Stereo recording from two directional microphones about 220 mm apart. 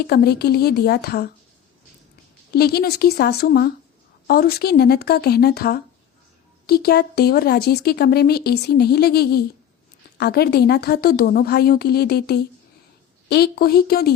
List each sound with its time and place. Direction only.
0.0 s speech: 45° left (ahead or behind)
2.5 s speech: 45° left (ahead or behind)